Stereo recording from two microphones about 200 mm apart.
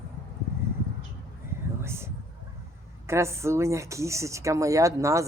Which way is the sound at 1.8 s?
10° right (ahead or behind).